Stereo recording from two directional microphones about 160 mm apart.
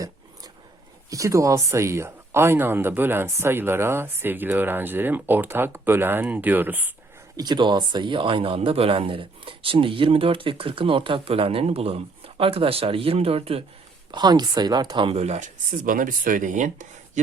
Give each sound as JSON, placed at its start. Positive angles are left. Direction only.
{"t": 1.1, "sound": "speech", "side_deg": -20}
{"t": 7.3, "sound": "speech", "side_deg": -25}
{"t": 14.1, "sound": "speech", "side_deg": -25}